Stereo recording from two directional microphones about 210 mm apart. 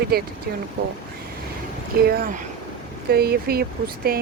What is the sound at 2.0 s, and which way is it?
Speech, 45° right (ahead or behind).